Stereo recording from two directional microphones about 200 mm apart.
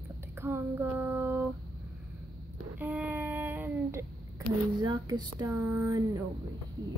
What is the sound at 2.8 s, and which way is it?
Speech, 5° right (ahead or behind).